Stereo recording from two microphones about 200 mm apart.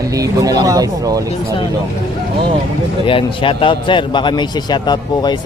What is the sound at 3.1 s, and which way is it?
A man's voice, 25° left (ahead or behind).